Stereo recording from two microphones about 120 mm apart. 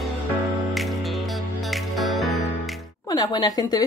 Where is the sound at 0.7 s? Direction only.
Centre (ahead or behind).